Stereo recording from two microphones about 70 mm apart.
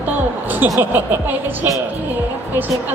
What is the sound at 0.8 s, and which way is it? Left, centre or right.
Speech, right.